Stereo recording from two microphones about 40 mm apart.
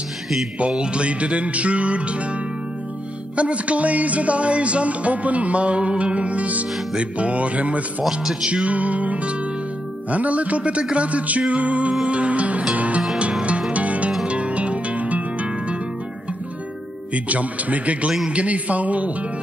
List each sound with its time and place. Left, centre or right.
0.6 s music: right
3.3 s music: right
8.1 s speech: centre
8.5 s music: right
17.1 s music: right